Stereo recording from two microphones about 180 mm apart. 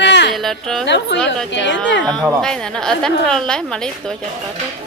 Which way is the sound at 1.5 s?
85° left.